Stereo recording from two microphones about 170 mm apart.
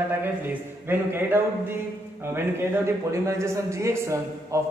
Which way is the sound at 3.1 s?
15° right (ahead or behind).